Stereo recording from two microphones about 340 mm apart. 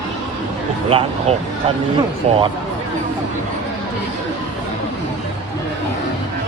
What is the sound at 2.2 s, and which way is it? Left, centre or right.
Speech, right.